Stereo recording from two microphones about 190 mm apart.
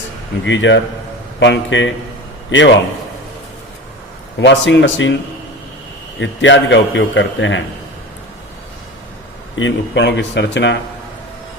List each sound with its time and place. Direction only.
0.4 s a man's voice: 75° left (ahead or behind)
4.4 s a man's voice: 75° left (ahead or behind)
6.1 s a man's voice: 75° left (ahead or behind)
9.6 s a man's voice: 80° left